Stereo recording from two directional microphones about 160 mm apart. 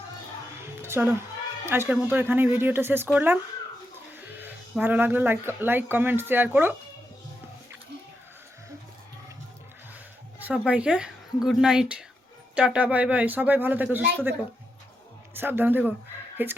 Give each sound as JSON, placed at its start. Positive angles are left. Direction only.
{"t": 0.5, "sound": "music", "side_deg": -15}
{"t": 1.6, "sound": "speech", "side_deg": -15}
{"t": 4.3, "sound": "music", "side_deg": -10}
{"t": 4.8, "sound": "speech", "side_deg": -10}
{"t": 10.4, "sound": "a woman's voice", "side_deg": -5}